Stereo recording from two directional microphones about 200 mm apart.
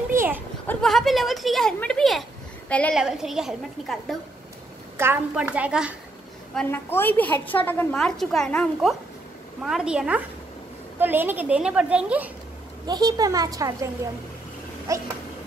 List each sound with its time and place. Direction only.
0.1 s goat: 10° right (ahead or behind)
0.7 s a woman's voice: centre (ahead or behind)
4.9 s a woman's voice: 10° right (ahead or behind)
6.5 s a woman's voice: 10° left (ahead or behind); by 12.3 s 5° right (ahead or behind)
12.8 s a woman's voice: 20° right (ahead or behind)
14.9 s a woman's voice: 15° right (ahead or behind)